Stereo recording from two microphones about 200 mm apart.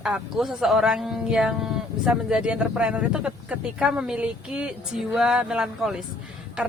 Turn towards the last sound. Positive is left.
turn(degrees=-5)  # may be behind; listen again after turning